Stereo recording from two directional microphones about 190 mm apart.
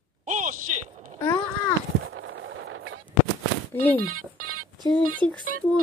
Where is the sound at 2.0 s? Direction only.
90° right.